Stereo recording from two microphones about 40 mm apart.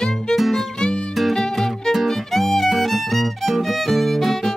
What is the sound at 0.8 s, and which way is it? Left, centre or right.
Music, left.